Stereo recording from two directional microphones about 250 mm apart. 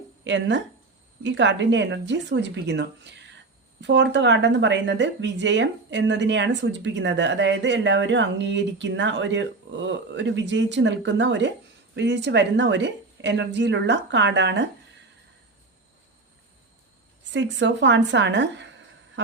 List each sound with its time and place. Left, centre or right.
0.3 s a woman's voice: right
17.3 s a woman's voice: right